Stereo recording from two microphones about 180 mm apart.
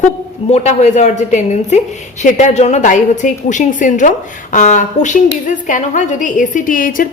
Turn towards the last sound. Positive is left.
turn(degrees=50)  # may be behind; listen again after turning